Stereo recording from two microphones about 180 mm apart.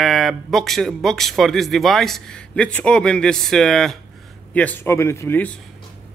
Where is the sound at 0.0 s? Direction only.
Centre (ahead or behind).